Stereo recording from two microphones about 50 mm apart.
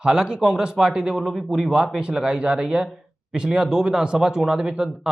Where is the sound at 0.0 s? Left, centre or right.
Centre.